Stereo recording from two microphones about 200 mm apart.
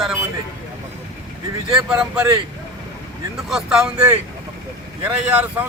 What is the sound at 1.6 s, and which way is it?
Speech, 5° right (ahead or behind).